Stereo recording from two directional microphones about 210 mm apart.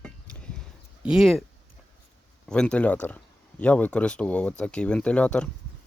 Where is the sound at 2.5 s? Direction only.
5° left (ahead or behind).